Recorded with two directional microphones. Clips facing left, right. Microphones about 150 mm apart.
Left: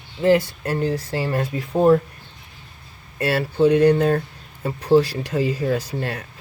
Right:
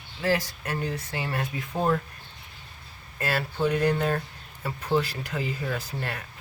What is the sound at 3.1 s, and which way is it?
Speech, 25° left (ahead or behind).